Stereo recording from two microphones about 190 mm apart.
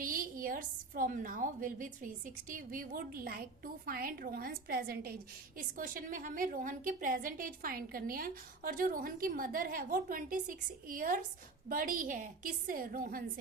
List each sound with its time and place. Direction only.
0.0 s a woman's voice: 50° right (ahead or behind)